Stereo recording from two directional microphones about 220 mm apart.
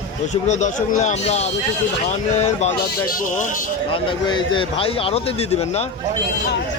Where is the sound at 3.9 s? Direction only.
20° left (ahead or behind).